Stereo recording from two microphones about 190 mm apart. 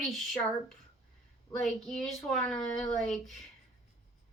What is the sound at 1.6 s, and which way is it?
Speech, centre (ahead or behind).